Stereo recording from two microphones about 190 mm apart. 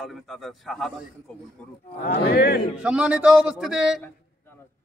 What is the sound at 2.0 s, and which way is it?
Speech, 55° left (ahead or behind).